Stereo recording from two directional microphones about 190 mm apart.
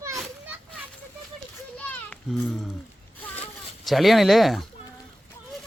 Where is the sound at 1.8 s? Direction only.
10° left (ahead or behind).